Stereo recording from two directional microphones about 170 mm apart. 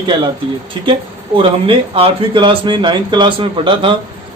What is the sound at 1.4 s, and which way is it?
Speech, 30° right (ahead or behind).